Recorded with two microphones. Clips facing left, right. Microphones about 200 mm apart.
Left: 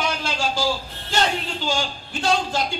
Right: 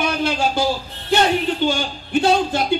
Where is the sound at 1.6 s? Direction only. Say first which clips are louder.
Right 5 dB; 60° right (ahead or behind).